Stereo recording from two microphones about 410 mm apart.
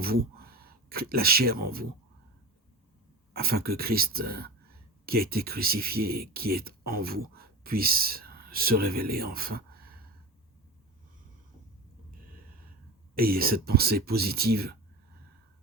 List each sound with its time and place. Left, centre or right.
0.0 s speech: right
3.3 s speech: right
13.1 s speech: right